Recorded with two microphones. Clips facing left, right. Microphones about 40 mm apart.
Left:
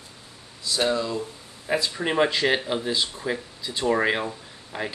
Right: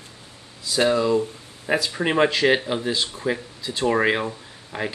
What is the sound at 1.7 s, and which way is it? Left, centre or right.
Speech, right.